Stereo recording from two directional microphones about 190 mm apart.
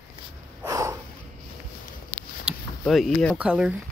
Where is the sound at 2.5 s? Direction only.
5° right (ahead or behind).